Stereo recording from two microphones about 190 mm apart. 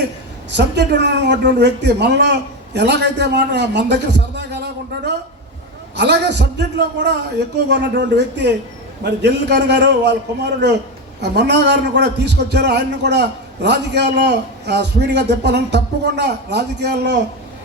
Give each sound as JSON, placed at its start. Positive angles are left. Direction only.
{"t": 0.5, "sound": "a man's voice", "side_deg": -65}
{"t": 6.0, "sound": "a man's voice", "side_deg": -65}